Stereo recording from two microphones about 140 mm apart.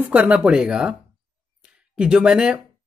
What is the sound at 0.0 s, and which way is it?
Speech, 10° right (ahead or behind).